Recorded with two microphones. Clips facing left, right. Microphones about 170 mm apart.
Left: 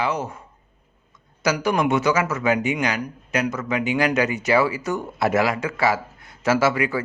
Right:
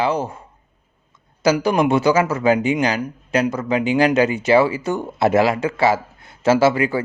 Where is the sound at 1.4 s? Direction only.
30° right (ahead or behind).